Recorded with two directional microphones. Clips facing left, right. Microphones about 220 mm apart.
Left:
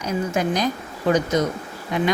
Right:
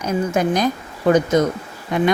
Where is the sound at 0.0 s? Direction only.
50° right (ahead or behind).